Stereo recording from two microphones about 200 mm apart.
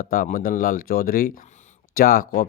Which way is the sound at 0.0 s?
45° left (ahead or behind).